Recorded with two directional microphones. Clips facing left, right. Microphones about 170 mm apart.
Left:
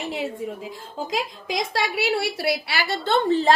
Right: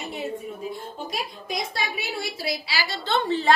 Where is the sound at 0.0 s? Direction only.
90° left.